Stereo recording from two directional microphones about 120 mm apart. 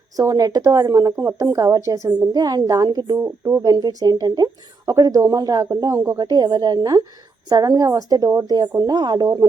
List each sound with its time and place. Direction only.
0.2 s a woman's voice: 30° right (ahead or behind)